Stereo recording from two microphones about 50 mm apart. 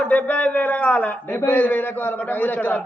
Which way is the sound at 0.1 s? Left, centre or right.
Left.